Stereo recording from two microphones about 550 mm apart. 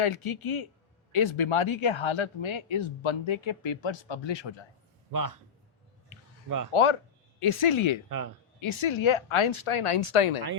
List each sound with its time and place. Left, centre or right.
0.0 s speech: left
5.1 s a man's voice: right
6.7 s speech: left